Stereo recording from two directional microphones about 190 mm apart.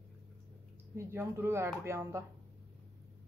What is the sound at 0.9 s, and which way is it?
A woman's voice, 10° right (ahead or behind).